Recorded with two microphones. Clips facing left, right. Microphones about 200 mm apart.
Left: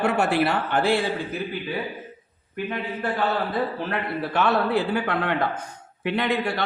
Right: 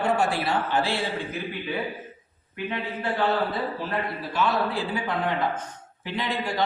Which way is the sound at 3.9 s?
65° left (ahead or behind).